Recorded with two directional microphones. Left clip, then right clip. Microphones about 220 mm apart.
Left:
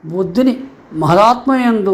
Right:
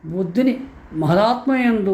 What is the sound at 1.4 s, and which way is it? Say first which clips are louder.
Speech: left 5 dB; 15° right (ahead or behind).